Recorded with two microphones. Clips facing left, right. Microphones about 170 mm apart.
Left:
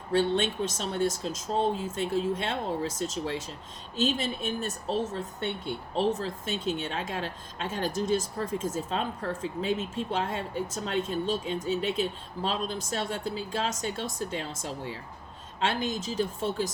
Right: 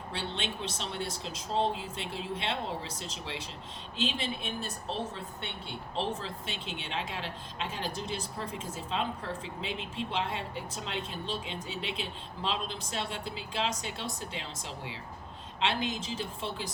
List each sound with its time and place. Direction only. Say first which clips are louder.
0.1 s speech: left 12 dB; 45° left (ahead or behind)